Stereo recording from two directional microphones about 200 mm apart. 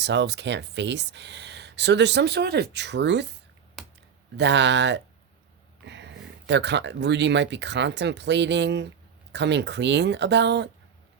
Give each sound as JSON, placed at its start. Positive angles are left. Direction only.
{"t": 0.0, "sound": "speech", "side_deg": -60}
{"t": 3.8, "sound": "computer keyboard", "side_deg": 0}
{"t": 4.4, "sound": "speech", "side_deg": -60}